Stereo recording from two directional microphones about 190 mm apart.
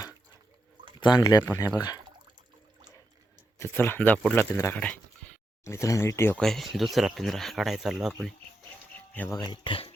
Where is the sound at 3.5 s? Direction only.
10° left (ahead or behind).